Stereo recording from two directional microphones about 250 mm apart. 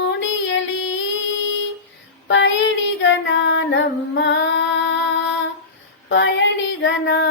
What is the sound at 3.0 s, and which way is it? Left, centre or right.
Female singing, left.